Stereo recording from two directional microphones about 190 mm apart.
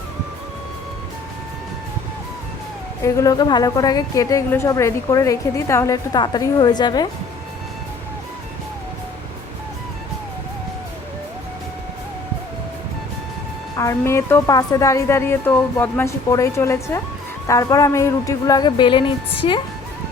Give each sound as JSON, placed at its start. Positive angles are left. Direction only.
{"t": 3.0, "sound": "a woman's voice", "side_deg": 15}
{"t": 13.7, "sound": "a woman's voice", "side_deg": 15}